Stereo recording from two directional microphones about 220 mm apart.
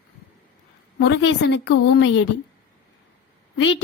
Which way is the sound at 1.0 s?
55° left (ahead or behind).